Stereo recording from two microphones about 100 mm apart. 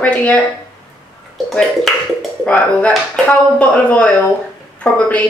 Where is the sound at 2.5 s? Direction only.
15° left (ahead or behind).